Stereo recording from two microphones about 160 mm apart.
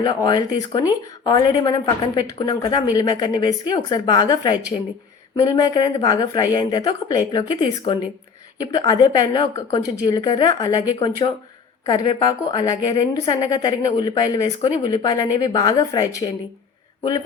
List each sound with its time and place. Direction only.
0.0 s a woman's voice: 30° left (ahead or behind)